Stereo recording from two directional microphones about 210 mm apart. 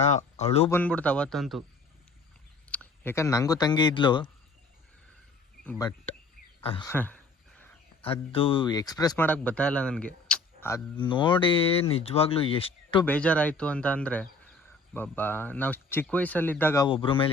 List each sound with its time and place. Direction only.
0.0 s speech: 30° left (ahead or behind)
0.7 s speech: 5° left (ahead or behind)
2.6 s speech: 10° left (ahead or behind)
5.6 s speech: 15° left (ahead or behind)
6.6 s speech: 25° left (ahead or behind)
6.8 s speech: 10° left (ahead or behind)
8.0 s speech: 25° left (ahead or behind); by 10.8 s 5° left (ahead or behind)
10.9 s speech: 20° left (ahead or behind)
13.1 s speech: 5° left (ahead or behind); by 17.3 s 25° left (ahead or behind)